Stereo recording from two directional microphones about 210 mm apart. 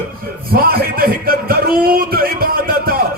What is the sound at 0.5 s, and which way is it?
Speech, 45° right (ahead or behind).